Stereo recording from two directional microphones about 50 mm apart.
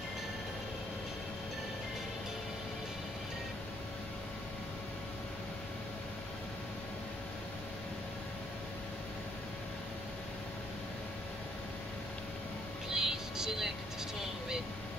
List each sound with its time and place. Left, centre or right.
12.9 s music: centre